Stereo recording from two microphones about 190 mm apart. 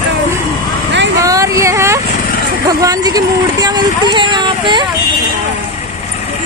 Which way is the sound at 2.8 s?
20° right (ahead or behind).